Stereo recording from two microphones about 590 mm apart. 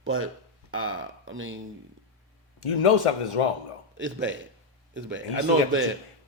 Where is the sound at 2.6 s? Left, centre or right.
Left.